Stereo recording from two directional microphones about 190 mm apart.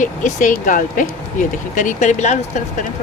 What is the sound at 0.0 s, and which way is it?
Speech, 45° left (ahead or behind).